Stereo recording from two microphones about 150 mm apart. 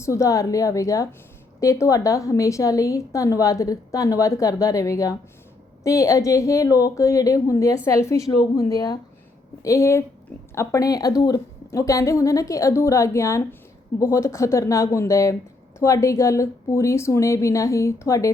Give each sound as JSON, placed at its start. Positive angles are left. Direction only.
{"t": 0.0, "sound": "a woman's voice", "side_deg": 20}